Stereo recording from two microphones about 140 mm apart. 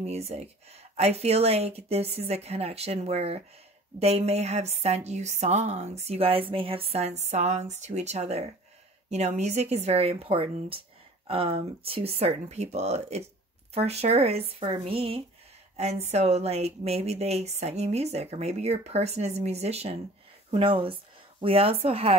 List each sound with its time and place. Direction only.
0.0 s speech: 50° right (ahead or behind)